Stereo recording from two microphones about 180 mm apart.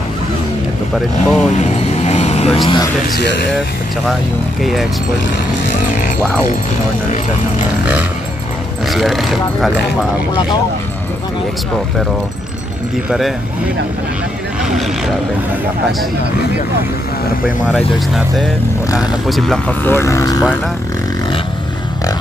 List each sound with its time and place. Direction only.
0.9 s speech: centre (ahead or behind)
1.5 s vehicle: 40° left (ahead or behind)
8.8 s speech: centre (ahead or behind)
17.6 s speech: centre (ahead or behind)
19.9 s speech: 15° left (ahead or behind)